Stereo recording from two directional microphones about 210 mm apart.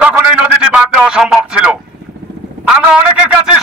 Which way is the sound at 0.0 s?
5° right (ahead or behind).